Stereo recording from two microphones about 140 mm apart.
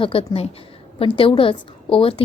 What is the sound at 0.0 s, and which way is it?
A woman's voice, 40° left (ahead or behind).